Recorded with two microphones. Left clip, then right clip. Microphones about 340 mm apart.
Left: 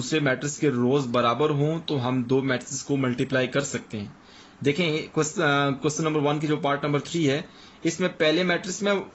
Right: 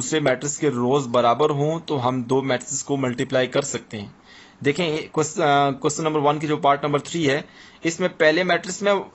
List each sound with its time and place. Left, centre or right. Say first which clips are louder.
0.1 s speech: right 4 dB; centre